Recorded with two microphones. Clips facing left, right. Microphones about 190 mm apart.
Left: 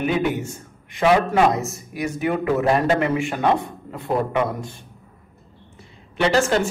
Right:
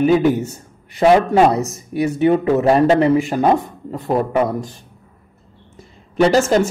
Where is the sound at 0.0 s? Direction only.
35° right (ahead or behind).